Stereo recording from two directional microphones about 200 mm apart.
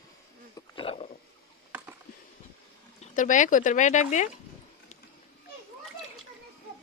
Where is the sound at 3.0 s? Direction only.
40° left (ahead or behind).